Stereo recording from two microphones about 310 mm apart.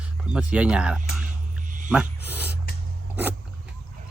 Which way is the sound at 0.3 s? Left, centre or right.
Centre.